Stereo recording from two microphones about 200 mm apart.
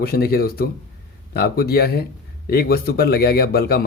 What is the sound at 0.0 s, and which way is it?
Speech, 50° left (ahead or behind).